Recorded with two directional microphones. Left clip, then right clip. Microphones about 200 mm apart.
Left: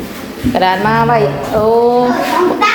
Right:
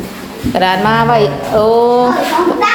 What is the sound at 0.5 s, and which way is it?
Speech, centre (ahead or behind).